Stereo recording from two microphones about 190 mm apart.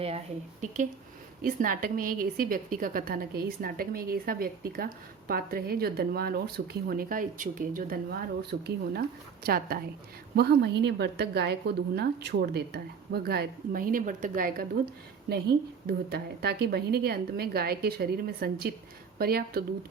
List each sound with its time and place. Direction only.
1.4 s a woman's voice: 50° right (ahead or behind)
15.9 s a woman's voice: 55° right (ahead or behind)